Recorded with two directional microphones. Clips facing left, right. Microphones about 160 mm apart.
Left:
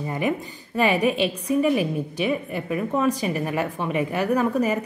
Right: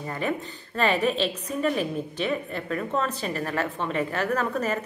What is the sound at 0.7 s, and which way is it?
A woman's voice, 10° left (ahead or behind).